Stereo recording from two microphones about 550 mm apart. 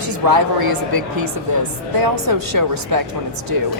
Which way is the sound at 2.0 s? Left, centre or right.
Right.